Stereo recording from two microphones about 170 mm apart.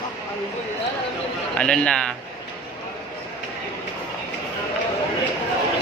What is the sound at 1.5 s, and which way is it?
Speech, 5° left (ahead or behind).